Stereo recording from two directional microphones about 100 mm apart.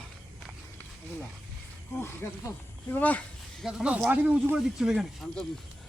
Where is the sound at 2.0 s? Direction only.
25° left (ahead or behind).